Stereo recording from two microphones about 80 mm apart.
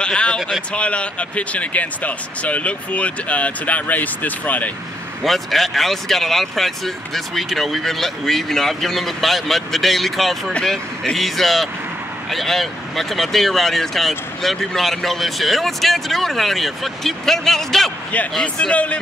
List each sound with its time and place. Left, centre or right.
0.0 s speech: centre
5.2 s speech: centre
18.4 s speech: centre